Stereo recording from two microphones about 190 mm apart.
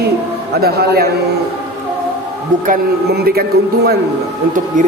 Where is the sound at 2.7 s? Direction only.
55° right (ahead or behind).